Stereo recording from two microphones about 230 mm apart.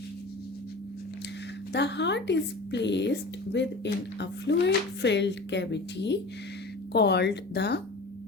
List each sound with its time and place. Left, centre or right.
1.7 s speech: left